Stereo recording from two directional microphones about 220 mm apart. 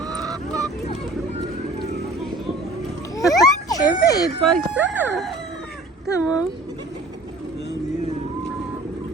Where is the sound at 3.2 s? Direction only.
15° left (ahead or behind).